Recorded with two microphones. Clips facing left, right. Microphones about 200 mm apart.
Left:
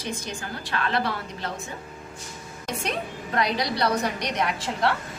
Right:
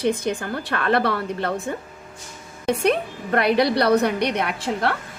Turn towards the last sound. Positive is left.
turn(degrees=-55)  # may be behind; listen again after turning